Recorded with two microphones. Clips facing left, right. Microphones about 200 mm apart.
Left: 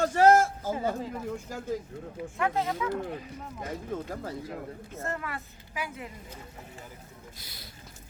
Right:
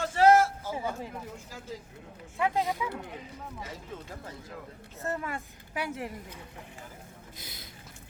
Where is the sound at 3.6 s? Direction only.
50° left (ahead or behind).